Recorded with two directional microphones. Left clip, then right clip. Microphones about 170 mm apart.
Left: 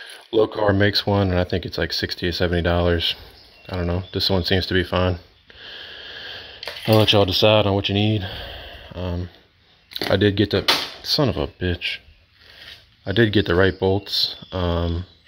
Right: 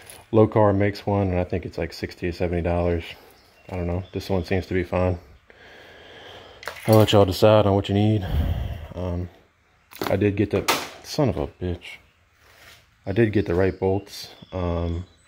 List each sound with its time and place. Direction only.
0.3 s speech: 5° left (ahead or behind)
4.2 s speech: 25° left (ahead or behind)
4.6 s speech: 5° left (ahead or behind)
5.6 s sniff: centre (ahead or behind)
6.6 s speech: 10° right (ahead or behind)
10.1 s speech: 5° left (ahead or behind)
11.0 s speech: 10° right (ahead or behind)
11.3 s speech: 10° left (ahead or behind)
13.0 s speech: centre (ahead or behind)